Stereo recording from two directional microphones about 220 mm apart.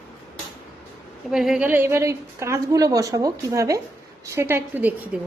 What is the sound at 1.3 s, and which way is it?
A woman's voice, centre (ahead or behind).